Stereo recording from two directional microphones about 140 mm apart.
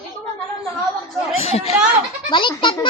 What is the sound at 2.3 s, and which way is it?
Speech, 35° left (ahead or behind).